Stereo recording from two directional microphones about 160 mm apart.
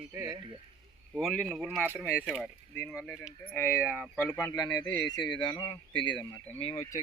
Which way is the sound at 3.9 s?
5° right (ahead or behind).